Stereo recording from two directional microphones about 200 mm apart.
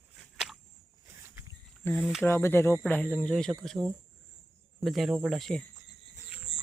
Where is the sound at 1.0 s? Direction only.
15° right (ahead or behind).